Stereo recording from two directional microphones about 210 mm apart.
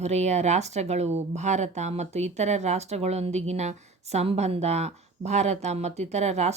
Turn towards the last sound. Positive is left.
turn(degrees=-30)  # may be behind; listen again after turning